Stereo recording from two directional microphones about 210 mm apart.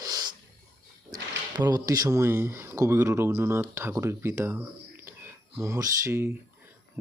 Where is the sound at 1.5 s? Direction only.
20° right (ahead or behind).